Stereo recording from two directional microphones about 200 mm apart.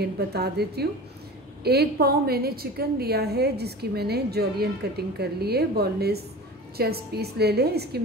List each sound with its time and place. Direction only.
0.0 s a woman's voice: 55° right (ahead or behind)